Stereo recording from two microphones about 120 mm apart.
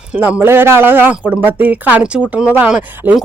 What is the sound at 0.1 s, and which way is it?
A woman's voice, 10° right (ahead or behind).